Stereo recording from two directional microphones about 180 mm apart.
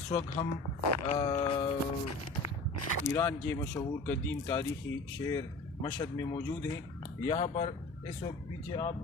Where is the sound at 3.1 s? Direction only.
15° left (ahead or behind).